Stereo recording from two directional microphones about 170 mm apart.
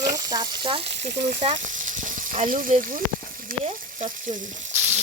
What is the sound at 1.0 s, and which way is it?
Frying, 50° right (ahead or behind).